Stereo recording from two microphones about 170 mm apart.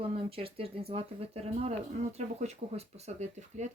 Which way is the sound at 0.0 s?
35° right (ahead or behind).